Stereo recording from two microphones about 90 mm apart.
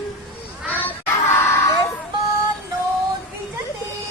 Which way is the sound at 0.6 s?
25° left (ahead or behind).